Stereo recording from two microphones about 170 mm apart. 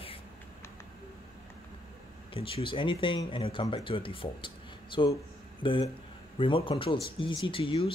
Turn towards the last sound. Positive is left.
turn(degrees=30)  # may be behind; listen again after turning